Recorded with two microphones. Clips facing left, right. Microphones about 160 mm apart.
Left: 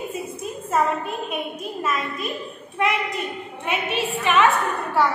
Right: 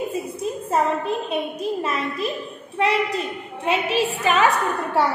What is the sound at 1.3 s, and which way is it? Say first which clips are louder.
Speech: right 5 dB; 30° right (ahead or behind).